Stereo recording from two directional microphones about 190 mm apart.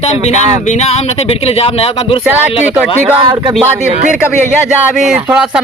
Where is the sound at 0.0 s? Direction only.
35° left (ahead or behind).